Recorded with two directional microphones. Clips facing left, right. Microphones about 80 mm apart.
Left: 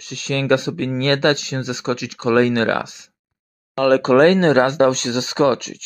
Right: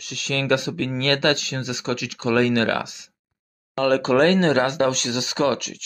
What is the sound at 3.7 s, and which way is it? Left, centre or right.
Speech, left.